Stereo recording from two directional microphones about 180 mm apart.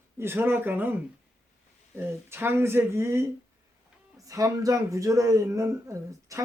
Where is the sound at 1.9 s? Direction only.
15° right (ahead or behind).